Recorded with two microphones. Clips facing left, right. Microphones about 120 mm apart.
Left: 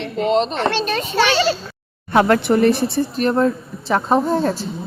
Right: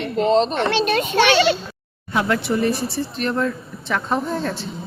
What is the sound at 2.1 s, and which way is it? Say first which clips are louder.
Speech: left 6 dB; 60° left (ahead or behind).